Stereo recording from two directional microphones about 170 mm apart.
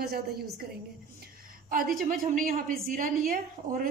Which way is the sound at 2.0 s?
55° right (ahead or behind).